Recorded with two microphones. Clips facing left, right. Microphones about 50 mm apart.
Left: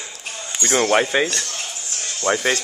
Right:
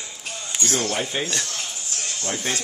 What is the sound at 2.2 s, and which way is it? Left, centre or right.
Speech, left.